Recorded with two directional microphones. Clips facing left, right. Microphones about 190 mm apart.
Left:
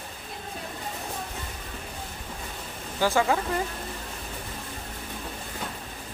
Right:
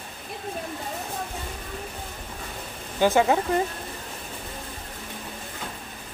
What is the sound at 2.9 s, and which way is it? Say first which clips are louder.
Speech: right 4 dB; 20° right (ahead or behind).